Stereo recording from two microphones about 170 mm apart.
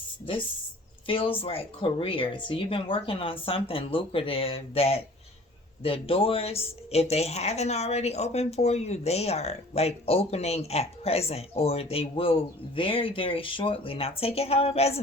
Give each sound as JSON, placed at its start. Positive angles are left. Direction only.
{"t": 1.0, "sound": "speech", "side_deg": 30}